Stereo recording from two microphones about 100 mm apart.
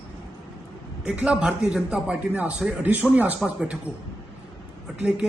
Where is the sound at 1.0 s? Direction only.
10° right (ahead or behind).